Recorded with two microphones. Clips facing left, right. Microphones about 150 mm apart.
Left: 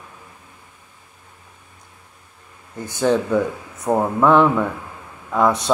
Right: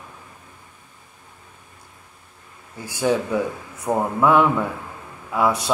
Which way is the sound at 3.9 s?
20° left (ahead or behind).